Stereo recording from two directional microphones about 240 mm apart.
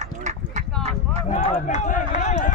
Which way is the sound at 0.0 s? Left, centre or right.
Right.